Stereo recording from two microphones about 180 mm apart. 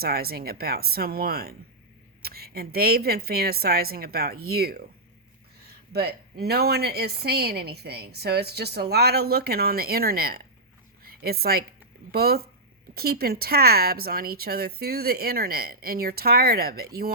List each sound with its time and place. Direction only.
0.0 s speech: 60° right (ahead or behind)
11.0 s a sound: 55° right (ahead or behind)
12.1 s speech: 60° right (ahead or behind)